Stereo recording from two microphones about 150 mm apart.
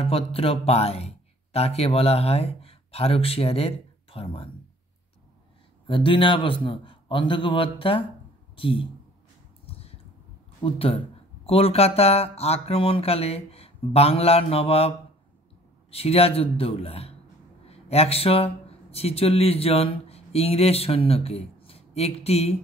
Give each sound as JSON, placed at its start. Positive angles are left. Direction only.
{"t": 0.0, "sound": "speech", "side_deg": 40}
{"t": 5.9, "sound": "speech", "side_deg": 35}
{"t": 9.7, "sound": "a sound", "side_deg": 40}
{"t": 10.6, "sound": "speech", "side_deg": 40}
{"t": 15.9, "sound": "speech", "side_deg": 40}